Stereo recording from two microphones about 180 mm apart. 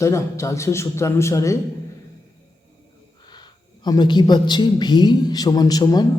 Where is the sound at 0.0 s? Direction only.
15° left (ahead or behind).